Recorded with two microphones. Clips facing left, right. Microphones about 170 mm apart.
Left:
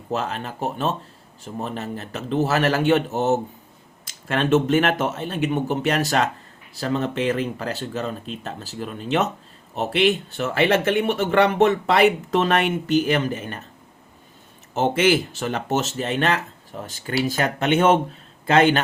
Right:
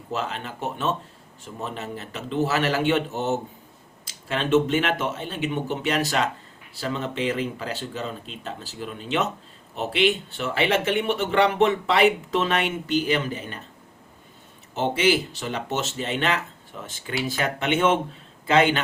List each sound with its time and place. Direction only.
0.1 s speech: 45° left (ahead or behind)
14.8 s speech: 50° left (ahead or behind)